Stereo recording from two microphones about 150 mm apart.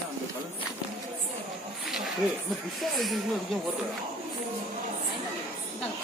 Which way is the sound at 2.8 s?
Centre (ahead or behind).